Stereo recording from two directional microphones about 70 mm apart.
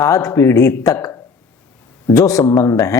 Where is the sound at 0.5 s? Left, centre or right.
Left.